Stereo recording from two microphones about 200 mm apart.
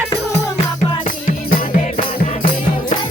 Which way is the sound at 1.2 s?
40° left (ahead or behind).